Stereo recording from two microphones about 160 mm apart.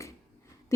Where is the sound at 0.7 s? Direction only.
20° left (ahead or behind).